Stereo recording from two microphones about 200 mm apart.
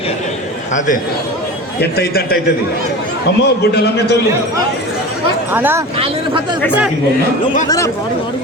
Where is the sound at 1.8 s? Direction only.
50° left (ahead or behind).